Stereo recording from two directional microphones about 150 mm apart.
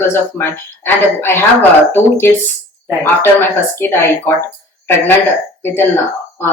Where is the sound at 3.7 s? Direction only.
15° left (ahead or behind).